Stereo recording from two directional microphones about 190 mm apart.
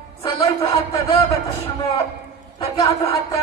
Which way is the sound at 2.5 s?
25° left (ahead or behind).